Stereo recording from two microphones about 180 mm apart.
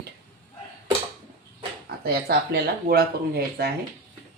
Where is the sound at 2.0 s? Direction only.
60° right (ahead or behind).